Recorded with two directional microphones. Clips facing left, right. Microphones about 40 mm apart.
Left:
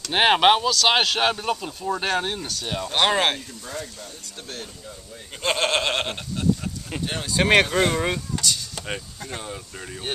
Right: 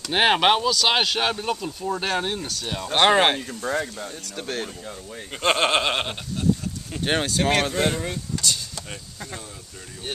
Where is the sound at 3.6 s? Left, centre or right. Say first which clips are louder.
Right 9 dB; right.